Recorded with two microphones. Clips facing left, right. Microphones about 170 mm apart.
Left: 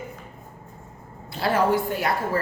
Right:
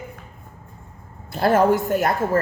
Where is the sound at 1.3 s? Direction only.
50° right (ahead or behind).